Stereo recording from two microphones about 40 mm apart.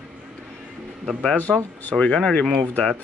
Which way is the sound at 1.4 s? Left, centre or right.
Left.